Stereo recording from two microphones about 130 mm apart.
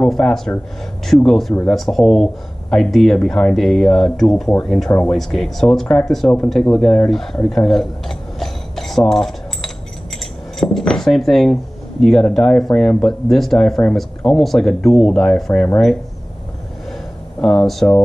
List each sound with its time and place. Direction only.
0.0 s speech: 5° left (ahead or behind)
17.4 s speech: 5° left (ahead or behind)